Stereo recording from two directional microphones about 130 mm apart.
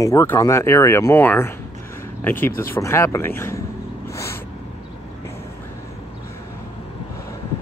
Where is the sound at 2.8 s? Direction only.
20° left (ahead or behind).